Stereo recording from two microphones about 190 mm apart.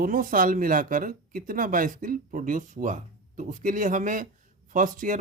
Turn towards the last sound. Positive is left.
turn(degrees=-45)  # may be behind; listen again after turning